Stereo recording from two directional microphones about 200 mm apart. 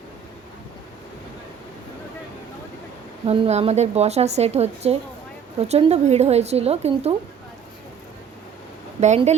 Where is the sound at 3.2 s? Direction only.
30° right (ahead or behind).